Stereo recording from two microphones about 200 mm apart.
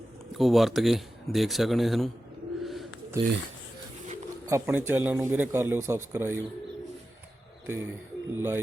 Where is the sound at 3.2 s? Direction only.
15° right (ahead or behind).